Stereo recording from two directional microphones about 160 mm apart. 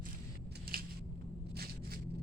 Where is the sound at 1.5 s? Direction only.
70° right (ahead or behind).